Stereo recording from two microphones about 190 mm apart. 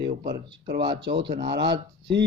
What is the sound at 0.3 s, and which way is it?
Speech, 60° right (ahead or behind).